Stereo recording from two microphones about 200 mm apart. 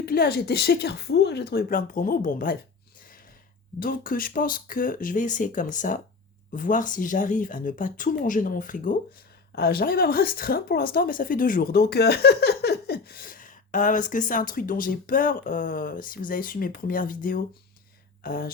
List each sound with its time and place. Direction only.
0.0 s speech: 50° left (ahead or behind)
3.8 s speech: 45° left (ahead or behind)